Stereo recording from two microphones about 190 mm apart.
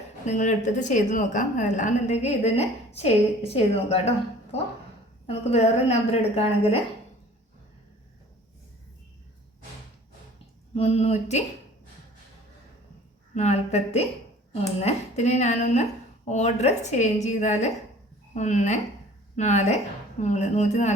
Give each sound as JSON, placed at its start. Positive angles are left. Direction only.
{"t": 0.3, "sound": "a woman's voice", "side_deg": 40}
{"t": 5.2, "sound": "a woman's voice", "side_deg": 35}
{"t": 10.8, "sound": "a woman's voice", "side_deg": 35}
{"t": 13.3, "sound": "a woman's voice", "side_deg": 35}